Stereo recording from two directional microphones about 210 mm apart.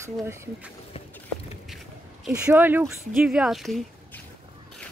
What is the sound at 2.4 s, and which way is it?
Speech, 10° right (ahead or behind).